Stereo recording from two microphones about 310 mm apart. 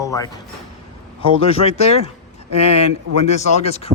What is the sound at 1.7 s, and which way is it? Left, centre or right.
Speech, centre.